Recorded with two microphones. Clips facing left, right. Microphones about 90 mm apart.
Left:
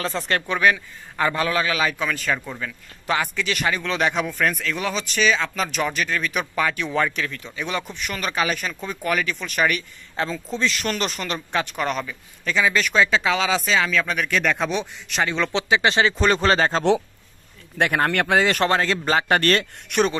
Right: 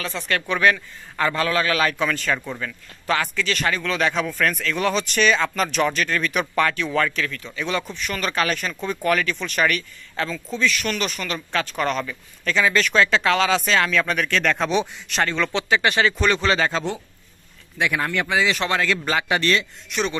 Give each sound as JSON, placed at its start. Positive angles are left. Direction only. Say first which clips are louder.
{"t": 0.0, "sound": "speech", "louder": "left 2 dB", "side_deg": 25}
{"t": 0.6, "sound": "a man's voice", "louder": "right 1 dB", "side_deg": 10}
{"t": 1.8, "sound": "speech", "louder": "right 2 dB", "side_deg": 5}
{"t": 3.1, "sound": "a man's voice", "louder": "right 1 dB", "side_deg": 15}
{"t": 6.8, "sound": "a man's voice", "louder": "right 1 dB", "side_deg": 15}
{"t": 10.1, "sound": "speech", "louder": "left 1 dB", "side_deg": 25}
{"t": 11.7, "sound": "speech", "louder": "right 2 dB", "side_deg": 10}
{"t": 15.3, "sound": "speech", "louder": "left 2 dB", "side_deg": 20}
{"t": 16.3, "sound": "speech", "louder": "left 2 dB", "side_deg": 35}
{"t": 17.7, "sound": "speech", "louder": "left 3 dB", "side_deg": 50}